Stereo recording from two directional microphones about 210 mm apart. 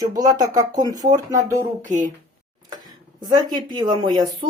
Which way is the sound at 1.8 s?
35° right (ahead or behind).